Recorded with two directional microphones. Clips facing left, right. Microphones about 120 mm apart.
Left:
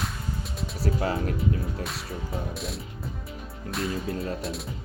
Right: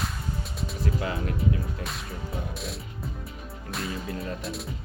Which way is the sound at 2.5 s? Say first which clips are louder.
Left 2 dB; centre (ahead or behind).